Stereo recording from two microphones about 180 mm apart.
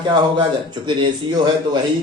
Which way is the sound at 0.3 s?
25° right (ahead or behind).